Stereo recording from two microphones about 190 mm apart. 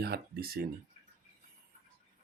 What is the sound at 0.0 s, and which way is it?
Speech, 55° right (ahead or behind).